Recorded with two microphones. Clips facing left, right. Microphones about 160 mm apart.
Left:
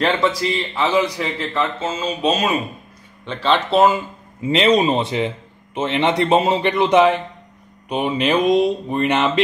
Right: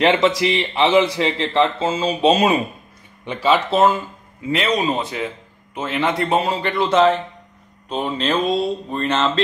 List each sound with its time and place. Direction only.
0.0 s speech: 20° right (ahead or behind)
3.3 s speech: 10° right (ahead or behind)
4.4 s a man's voice: 25° left (ahead or behind)